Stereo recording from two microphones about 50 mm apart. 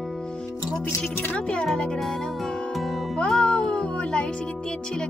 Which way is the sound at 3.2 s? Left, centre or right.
Centre.